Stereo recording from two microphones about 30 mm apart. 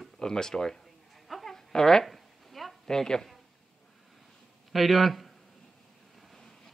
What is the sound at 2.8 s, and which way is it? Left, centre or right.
Speech, left.